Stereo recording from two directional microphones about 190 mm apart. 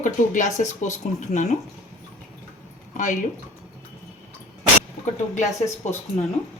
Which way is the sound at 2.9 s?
40° left (ahead or behind).